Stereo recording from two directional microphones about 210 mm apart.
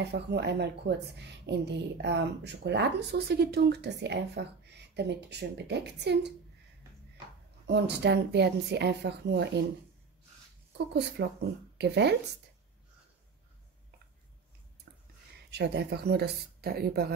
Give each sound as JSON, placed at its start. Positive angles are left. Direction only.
{"t": 0.0, "sound": "a woman's voice", "side_deg": -50}
{"t": 7.6, "sound": "a woman's voice", "side_deg": -55}
{"t": 10.9, "sound": "a woman's voice", "side_deg": -50}
{"t": 15.5, "sound": "a woman's voice", "side_deg": -50}